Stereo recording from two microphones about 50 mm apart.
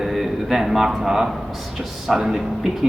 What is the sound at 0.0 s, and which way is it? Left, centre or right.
A man's voice, centre.